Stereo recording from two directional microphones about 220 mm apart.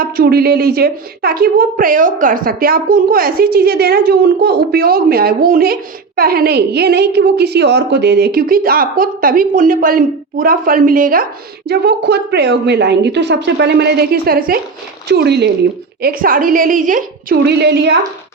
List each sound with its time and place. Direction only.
0.0 s a woman's voice: 45° right (ahead or behind)